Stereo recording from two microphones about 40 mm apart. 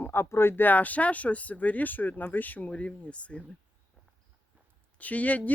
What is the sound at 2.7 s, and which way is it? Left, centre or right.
Speech, left.